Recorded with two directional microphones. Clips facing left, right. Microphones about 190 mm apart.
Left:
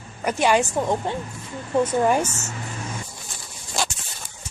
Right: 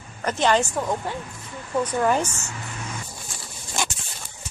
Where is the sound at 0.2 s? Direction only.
10° left (ahead or behind).